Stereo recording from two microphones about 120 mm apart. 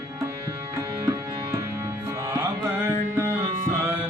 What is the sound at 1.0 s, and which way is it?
Music, 25° right (ahead or behind).